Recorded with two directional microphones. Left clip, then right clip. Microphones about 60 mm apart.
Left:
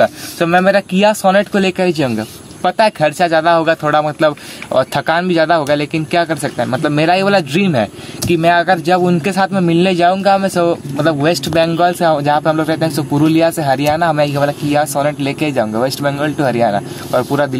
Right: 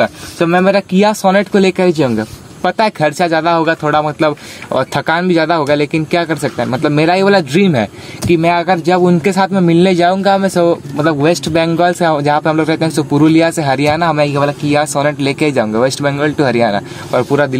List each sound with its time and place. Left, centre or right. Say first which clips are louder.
0.0 s speech: even; centre
0.7 s speech: even; right
4.3 s speech: right 1 dB; right
9.4 s speech: right 1 dB; right
15.5 s speech: right 2 dB; right
16.1 s speech: right 2 dB; right
16.3 s speech: right 1 dB; right